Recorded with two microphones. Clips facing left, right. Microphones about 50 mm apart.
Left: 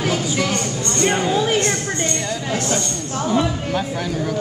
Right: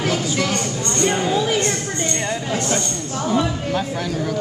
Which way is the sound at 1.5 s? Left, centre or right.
Left.